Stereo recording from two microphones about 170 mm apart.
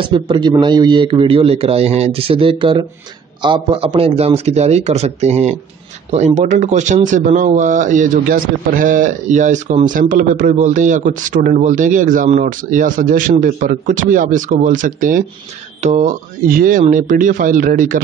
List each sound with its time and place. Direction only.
0.0 s speech: 25° right (ahead or behind); by 18.0 s 55° right (ahead or behind)